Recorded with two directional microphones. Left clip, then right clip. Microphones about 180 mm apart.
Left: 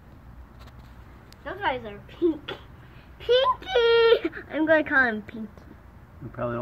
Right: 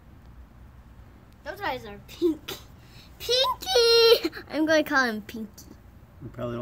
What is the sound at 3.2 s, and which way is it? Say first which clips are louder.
A child's voice: left 3 dB; 40° right (ahead or behind).